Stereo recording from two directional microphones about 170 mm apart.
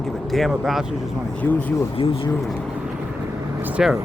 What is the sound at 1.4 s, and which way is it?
Speech, 10° left (ahead or behind).